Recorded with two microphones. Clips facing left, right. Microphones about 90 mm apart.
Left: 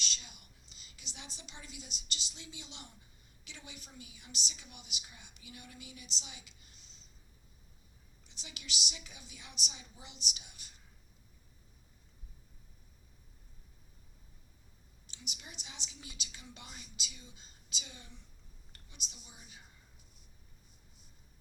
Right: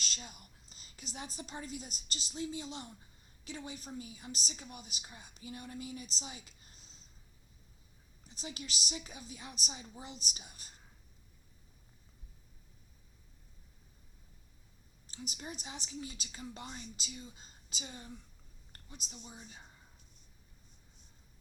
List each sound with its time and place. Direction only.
0.0 s a woman's voice: 40° right (ahead or behind)
8.2 s a woman's voice: 40° right (ahead or behind)
15.0 s a woman's voice: 40° right (ahead or behind)